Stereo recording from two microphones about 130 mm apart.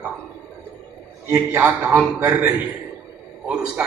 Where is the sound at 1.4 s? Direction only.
15° right (ahead or behind).